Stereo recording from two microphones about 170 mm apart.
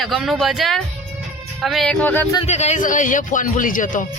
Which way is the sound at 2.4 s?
40° left (ahead or behind).